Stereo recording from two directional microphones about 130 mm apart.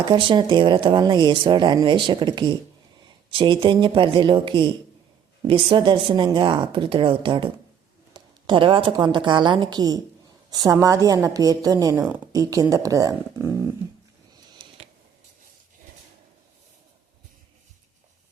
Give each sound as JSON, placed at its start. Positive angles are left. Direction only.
{"t": 0.0, "sound": "speech", "side_deg": -35}
{"t": 8.1, "sound": "a sound", "side_deg": -40}
{"t": 9.1, "sound": "a woman's voice", "side_deg": -35}